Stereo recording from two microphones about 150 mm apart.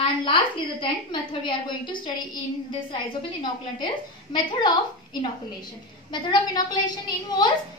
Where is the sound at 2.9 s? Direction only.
30° left (ahead or behind).